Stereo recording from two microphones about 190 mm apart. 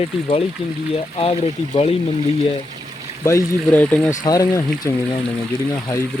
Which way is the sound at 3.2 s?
10° left (ahead or behind).